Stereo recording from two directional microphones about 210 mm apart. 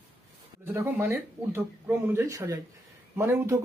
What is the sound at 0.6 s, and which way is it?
Speech, 10° right (ahead or behind).